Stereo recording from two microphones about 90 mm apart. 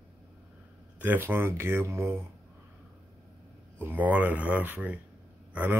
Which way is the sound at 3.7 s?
20° right (ahead or behind).